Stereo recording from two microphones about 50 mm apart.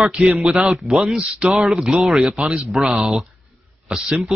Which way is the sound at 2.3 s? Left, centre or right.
Right.